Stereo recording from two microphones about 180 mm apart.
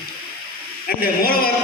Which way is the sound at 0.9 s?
55° left (ahead or behind).